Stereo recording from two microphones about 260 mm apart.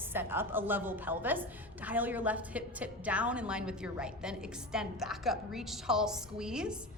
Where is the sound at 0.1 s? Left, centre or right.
Centre.